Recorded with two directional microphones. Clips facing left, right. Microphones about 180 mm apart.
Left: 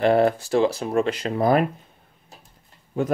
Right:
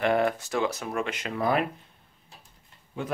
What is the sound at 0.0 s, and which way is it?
Speech, 35° left (ahead or behind).